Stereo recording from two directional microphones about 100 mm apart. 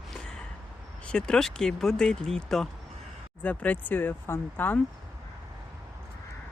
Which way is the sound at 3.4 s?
15° left (ahead or behind).